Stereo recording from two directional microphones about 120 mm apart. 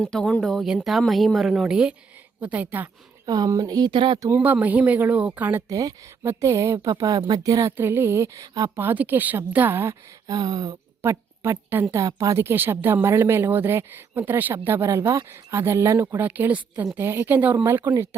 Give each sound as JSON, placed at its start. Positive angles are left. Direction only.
{"t": 0.0, "sound": "speech", "side_deg": 5}
{"t": 3.2, "sound": "speech", "side_deg": -35}
{"t": 4.3, "sound": "a woman's voice", "side_deg": -10}
{"t": 7.8, "sound": "a woman's voice", "side_deg": -20}
{"t": 8.8, "sound": "speech", "side_deg": -15}
{"t": 10.2, "sound": "speech", "side_deg": -30}
{"t": 11.0, "sound": "a woman's voice", "side_deg": -20}